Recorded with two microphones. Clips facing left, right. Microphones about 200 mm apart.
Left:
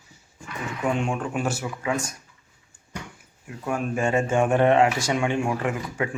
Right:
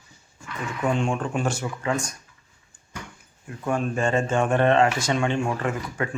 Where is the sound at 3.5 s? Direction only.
10° left (ahead or behind).